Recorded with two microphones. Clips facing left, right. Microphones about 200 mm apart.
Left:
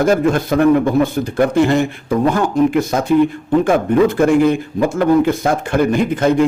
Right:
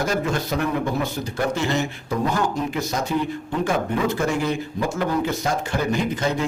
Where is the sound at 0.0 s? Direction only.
55° left (ahead or behind).